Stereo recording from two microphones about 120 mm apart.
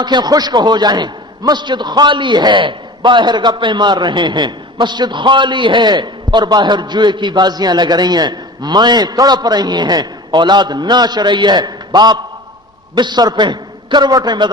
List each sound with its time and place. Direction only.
0.0 s a man's voice: 35° right (ahead or behind)